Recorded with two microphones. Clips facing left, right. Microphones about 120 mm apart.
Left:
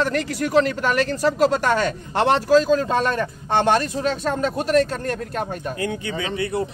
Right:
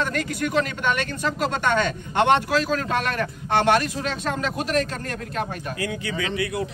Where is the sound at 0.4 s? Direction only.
35° left (ahead or behind).